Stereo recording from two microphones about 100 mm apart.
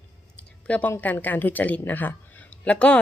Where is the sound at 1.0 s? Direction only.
15° left (ahead or behind).